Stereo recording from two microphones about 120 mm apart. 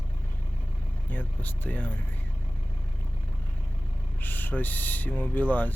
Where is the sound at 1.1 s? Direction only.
15° left (ahead or behind).